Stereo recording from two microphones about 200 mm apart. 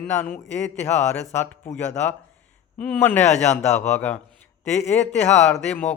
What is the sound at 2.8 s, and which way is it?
Speech, 5° left (ahead or behind).